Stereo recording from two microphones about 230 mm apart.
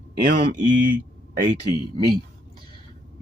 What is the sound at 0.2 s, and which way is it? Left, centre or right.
Speech, right.